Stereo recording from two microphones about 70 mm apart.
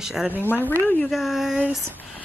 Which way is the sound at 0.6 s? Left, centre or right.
Right.